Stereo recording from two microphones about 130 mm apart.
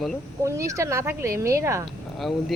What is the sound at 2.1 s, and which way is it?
Speech, centre (ahead or behind).